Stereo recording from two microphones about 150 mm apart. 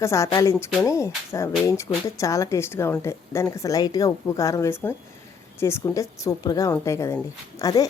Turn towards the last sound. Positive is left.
turn(degrees=25)  # may be behind; listen again after turning